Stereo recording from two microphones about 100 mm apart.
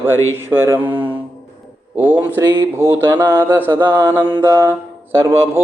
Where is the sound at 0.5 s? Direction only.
25° right (ahead or behind).